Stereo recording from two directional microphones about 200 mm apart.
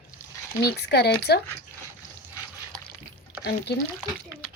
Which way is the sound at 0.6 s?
55° left (ahead or behind).